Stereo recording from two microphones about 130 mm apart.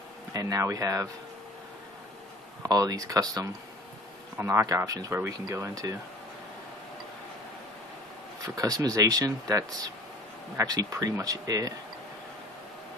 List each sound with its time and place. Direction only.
0.3 s speech: 25° right (ahead or behind)
2.7 s speech: 30° right (ahead or behind)
8.5 s speech: 25° right (ahead or behind)